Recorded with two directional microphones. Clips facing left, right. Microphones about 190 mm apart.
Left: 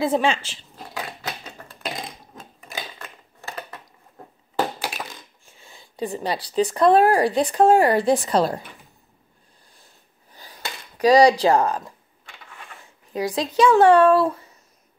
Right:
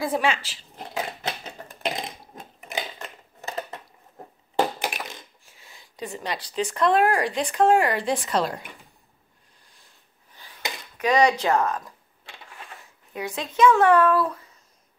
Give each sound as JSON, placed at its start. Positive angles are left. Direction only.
{"t": 0.0, "sound": "speech", "side_deg": 25}
{"t": 0.7, "sound": "crushing", "side_deg": -20}
{"t": 2.6, "sound": "a sound", "side_deg": -20}
{"t": 4.7, "sound": "crushing", "side_deg": -20}
{"t": 5.6, "sound": "speech", "side_deg": 30}
{"t": 10.3, "sound": "a sound", "side_deg": 40}
{"t": 11.0, "sound": "speech", "side_deg": 35}
{"t": 13.1, "sound": "speech", "side_deg": 35}